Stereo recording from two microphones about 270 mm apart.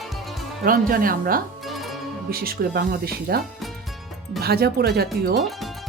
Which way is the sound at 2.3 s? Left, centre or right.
Right.